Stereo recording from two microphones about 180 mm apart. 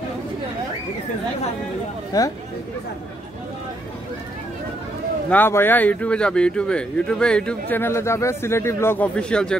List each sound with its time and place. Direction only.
2.1 s speech: 20° left (ahead or behind)
5.3 s speech: 10° left (ahead or behind)